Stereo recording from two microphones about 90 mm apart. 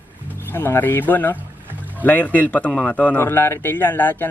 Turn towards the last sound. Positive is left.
turn(degrees=20)  # may be behind; listen again after turning